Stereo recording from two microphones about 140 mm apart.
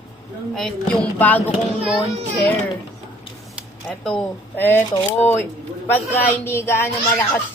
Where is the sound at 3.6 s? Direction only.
Centre (ahead or behind).